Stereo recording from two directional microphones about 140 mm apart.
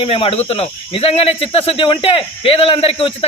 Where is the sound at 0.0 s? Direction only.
40° left (ahead or behind).